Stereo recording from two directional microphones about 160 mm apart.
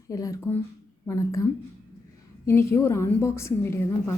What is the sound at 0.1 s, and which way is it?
Speech, 20° left (ahead or behind).